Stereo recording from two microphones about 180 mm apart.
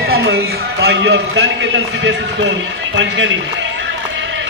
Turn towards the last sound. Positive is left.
turn(degrees=-90)